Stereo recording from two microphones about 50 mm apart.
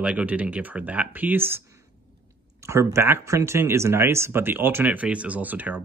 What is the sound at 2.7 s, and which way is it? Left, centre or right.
Speech, right.